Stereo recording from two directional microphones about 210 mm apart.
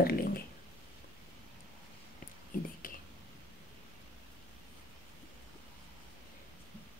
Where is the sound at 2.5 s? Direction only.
40° left (ahead or behind).